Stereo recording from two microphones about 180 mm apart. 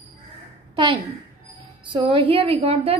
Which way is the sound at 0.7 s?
30° right (ahead or behind).